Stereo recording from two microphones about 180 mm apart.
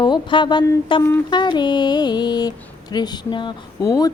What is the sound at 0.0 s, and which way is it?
Speech, 25° left (ahead or behind).